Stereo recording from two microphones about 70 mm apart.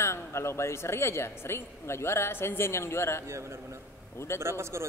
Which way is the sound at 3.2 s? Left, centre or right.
Right.